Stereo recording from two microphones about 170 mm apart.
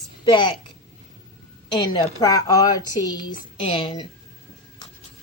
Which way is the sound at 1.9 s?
20° left (ahead or behind).